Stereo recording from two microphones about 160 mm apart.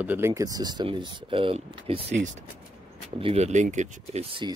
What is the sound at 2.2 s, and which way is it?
Speech, 50° right (ahead or behind).